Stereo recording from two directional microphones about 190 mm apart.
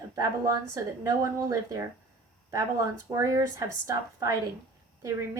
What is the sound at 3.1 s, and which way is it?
Speech, 20° right (ahead or behind).